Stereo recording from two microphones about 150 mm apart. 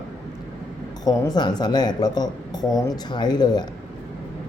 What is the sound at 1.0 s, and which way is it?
A woman's voice, 25° left (ahead or behind).